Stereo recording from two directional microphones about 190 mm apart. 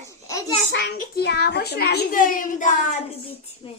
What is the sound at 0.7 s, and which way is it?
A child's voice, 60° left (ahead or behind).